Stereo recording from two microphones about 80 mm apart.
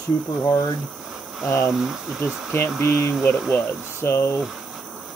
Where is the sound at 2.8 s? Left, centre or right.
Left.